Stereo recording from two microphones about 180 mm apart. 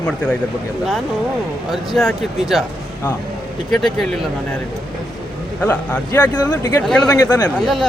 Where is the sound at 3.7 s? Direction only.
Centre (ahead or behind).